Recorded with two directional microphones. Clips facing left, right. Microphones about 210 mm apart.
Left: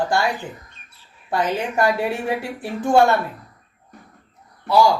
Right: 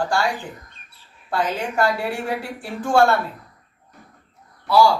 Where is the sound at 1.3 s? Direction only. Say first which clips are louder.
Left 1 dB; 15° left (ahead or behind).